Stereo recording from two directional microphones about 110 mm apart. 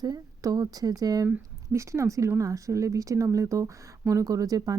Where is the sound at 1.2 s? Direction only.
25° right (ahead or behind).